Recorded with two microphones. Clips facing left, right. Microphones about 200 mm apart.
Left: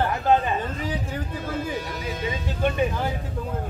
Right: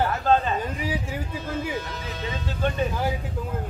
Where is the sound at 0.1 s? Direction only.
15° left (ahead or behind).